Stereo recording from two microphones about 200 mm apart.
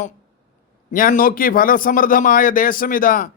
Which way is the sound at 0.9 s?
45° left (ahead or behind).